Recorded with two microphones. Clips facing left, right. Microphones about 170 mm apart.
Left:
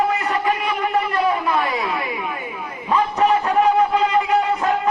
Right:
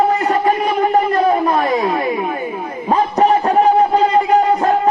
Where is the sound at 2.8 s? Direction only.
35° right (ahead or behind).